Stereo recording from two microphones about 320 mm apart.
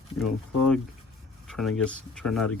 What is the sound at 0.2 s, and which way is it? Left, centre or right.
Speech, centre.